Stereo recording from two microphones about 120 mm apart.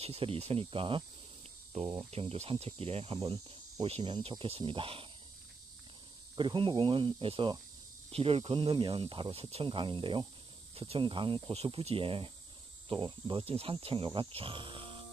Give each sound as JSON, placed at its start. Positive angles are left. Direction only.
{"t": 0.0, "sound": "speech", "side_deg": -55}
{"t": 1.7, "sound": "speech", "side_deg": -70}
{"t": 6.3, "sound": "speech", "side_deg": -40}
{"t": 11.5, "sound": "speech", "side_deg": -55}